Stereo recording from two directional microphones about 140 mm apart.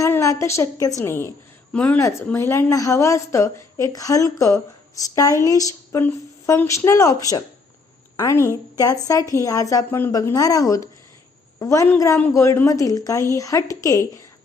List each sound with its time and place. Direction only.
0.0 s a woman's voice: 20° left (ahead or behind)